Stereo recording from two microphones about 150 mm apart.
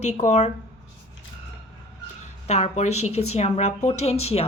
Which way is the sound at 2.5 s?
50° left (ahead or behind).